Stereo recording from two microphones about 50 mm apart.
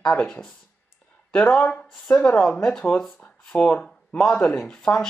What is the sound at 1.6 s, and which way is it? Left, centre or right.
Speech, left.